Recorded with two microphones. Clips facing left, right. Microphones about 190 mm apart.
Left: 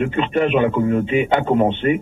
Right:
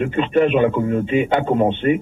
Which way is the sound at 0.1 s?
45° right (ahead or behind).